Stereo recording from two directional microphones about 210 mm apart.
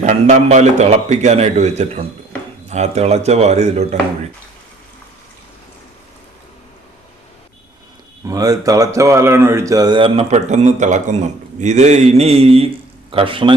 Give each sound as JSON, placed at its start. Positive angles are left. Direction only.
{"t": 0.0, "sound": "a man's voice", "side_deg": -35}
{"t": 8.3, "sound": "a man's voice", "side_deg": -15}